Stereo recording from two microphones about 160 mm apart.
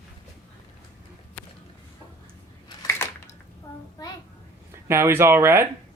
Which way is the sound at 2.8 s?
15° left (ahead or behind).